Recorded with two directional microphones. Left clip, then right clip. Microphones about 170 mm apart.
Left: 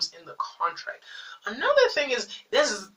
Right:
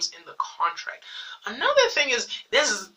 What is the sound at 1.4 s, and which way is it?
Speech, 15° right (ahead or behind).